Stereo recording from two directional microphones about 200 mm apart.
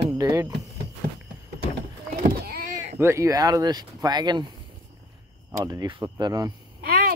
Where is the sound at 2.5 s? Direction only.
45° right (ahead or behind).